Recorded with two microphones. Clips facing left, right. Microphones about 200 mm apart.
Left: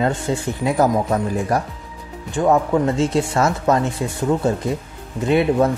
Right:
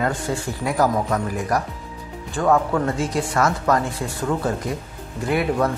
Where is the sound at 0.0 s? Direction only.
25° left (ahead or behind).